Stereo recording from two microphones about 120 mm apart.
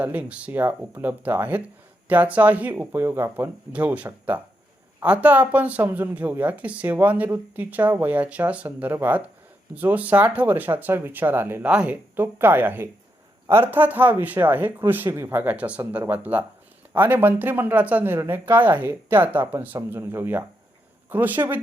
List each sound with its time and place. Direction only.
0.0 s speech: 10° right (ahead or behind)